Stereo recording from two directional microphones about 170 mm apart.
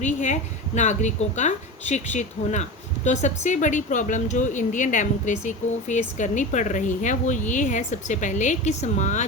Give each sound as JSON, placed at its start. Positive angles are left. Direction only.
{"t": 0.0, "sound": "a woman's voice", "side_deg": 45}